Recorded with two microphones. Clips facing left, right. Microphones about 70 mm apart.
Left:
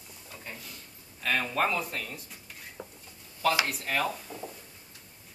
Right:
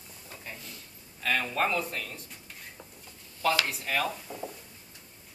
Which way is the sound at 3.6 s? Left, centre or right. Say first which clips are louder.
Even; centre.